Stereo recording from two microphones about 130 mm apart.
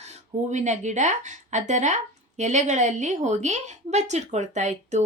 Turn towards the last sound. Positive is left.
turn(degrees=-65)  # may be behind; listen again after turning